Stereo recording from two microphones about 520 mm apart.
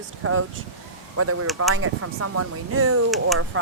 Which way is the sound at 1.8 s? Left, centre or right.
Right.